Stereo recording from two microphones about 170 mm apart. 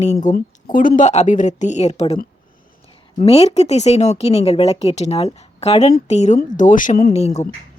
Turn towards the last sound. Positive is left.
turn(degrees=40)  # may be behind; listen again after turning